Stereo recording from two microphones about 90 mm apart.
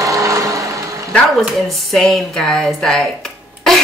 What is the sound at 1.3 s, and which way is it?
Speech, centre (ahead or behind).